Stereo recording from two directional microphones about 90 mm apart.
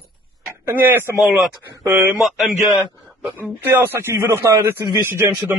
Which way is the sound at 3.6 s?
25° right (ahead or behind).